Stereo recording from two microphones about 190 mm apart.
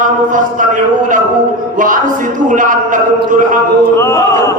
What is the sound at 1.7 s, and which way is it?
A man's voice, 45° right (ahead or behind).